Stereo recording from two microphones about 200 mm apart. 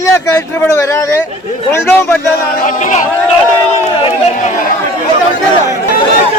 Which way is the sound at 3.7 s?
30° left (ahead or behind).